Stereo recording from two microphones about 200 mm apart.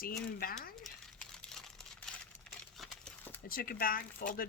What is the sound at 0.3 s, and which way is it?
Speech, 45° left (ahead or behind).